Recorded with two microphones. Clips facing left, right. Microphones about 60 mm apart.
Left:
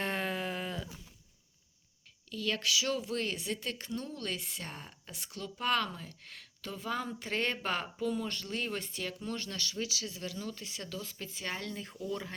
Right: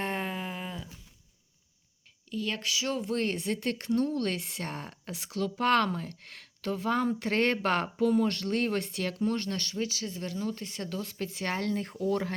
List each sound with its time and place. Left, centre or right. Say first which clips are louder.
0.0 s a sound: right 1 dB; right
2.3 s speech: even; right
9.2 s speech: right 8 dB; right